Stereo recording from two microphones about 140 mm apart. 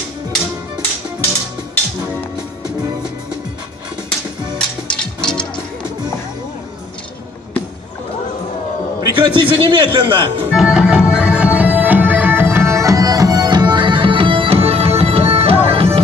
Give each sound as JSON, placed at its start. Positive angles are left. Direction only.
{"t": 4.6, "sound": "music", "side_deg": 5}
{"t": 9.0, "sound": "a man's voice", "side_deg": -35}
{"t": 10.5, "sound": "music", "side_deg": -5}